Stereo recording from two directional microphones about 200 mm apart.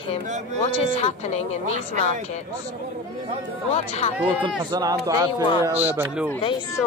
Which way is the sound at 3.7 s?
30° left (ahead or behind).